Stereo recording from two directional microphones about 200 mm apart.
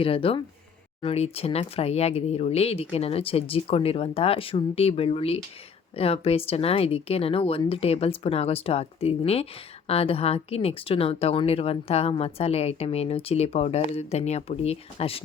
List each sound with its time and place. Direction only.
0.0 s speech: 30° left (ahead or behind)